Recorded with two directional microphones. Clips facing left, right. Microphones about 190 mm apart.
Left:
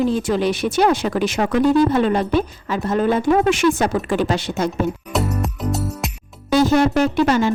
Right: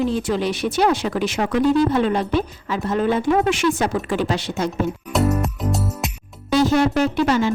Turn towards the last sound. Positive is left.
turn(degrees=50)  # may be behind; listen again after turning